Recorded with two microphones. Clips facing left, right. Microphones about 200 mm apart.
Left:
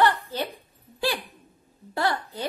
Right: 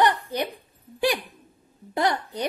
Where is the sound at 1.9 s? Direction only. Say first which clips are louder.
Right 2 dB; 20° right (ahead or behind).